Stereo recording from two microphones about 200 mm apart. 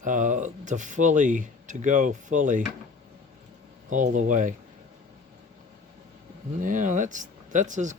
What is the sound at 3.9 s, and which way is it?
Speech, 40° right (ahead or behind).